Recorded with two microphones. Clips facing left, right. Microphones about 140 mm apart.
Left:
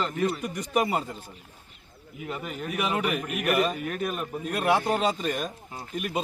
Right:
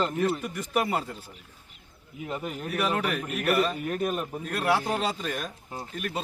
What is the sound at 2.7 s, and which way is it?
A man's voice, 10° left (ahead or behind).